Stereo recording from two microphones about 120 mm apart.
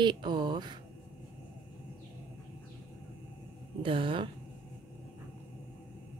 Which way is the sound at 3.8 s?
45° right (ahead or behind).